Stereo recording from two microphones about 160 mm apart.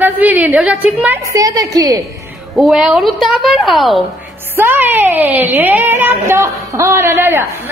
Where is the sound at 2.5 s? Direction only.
Centre (ahead or behind).